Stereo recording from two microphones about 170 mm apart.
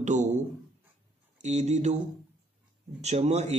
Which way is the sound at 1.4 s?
40° right (ahead or behind).